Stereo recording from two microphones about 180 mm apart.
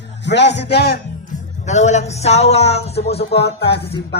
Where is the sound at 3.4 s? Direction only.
65° left (ahead or behind).